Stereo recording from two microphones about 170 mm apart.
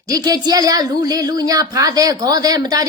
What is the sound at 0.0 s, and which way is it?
A woman's voice, 20° right (ahead or behind).